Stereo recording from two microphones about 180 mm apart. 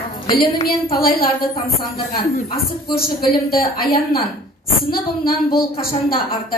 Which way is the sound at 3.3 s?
55° left (ahead or behind).